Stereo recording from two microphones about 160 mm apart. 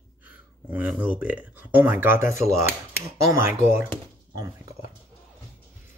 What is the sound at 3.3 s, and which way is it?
Speech, 15° right (ahead or behind).